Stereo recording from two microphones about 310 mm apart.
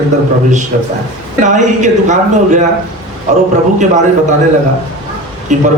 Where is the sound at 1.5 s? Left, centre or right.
Right.